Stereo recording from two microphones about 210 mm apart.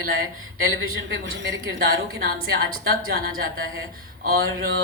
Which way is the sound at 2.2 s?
45° right (ahead or behind).